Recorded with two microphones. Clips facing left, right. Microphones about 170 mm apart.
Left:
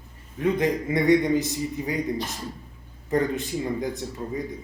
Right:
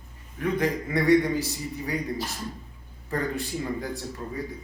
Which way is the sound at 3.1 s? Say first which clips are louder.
Left 5 dB; 20° left (ahead or behind).